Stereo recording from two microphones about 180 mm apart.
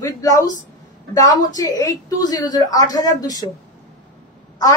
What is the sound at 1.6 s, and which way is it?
Speech, 20° left (ahead or behind).